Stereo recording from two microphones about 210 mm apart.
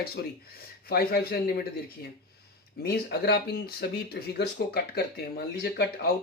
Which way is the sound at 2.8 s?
50° left (ahead or behind).